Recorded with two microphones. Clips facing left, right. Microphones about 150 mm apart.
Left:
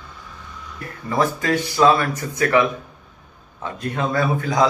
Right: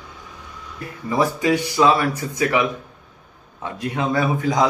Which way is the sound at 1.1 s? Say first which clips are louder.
Right 1 dB; 10° right (ahead or behind).